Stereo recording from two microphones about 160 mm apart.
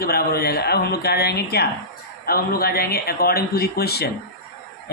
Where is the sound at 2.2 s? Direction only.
70° left (ahead or behind).